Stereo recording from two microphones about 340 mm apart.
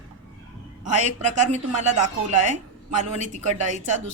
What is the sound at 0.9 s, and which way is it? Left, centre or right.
A woman's voice, right.